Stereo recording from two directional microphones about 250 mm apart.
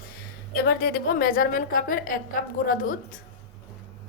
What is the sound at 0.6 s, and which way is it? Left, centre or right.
A woman's voice, left.